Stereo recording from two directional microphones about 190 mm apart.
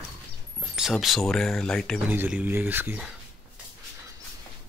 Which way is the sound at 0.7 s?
Centre (ahead or behind).